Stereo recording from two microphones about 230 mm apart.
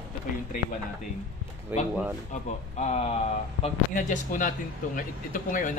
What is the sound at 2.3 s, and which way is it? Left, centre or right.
Speech, left.